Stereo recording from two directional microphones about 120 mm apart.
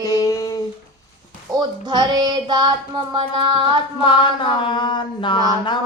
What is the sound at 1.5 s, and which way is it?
Child singing, 40° right (ahead or behind).